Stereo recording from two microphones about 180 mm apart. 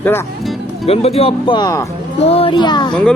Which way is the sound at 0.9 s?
35° left (ahead or behind).